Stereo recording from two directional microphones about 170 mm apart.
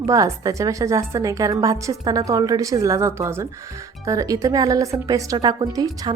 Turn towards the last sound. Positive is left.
turn(degrees=-20)  # may be behind; listen again after turning